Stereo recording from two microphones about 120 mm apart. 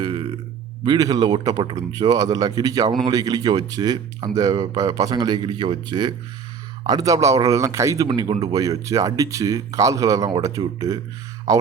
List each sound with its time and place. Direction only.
0.0 s a sound: 35° right (ahead or behind)
0.9 s speech: 30° right (ahead or behind)
8.0 s speech: 35° right (ahead or behind)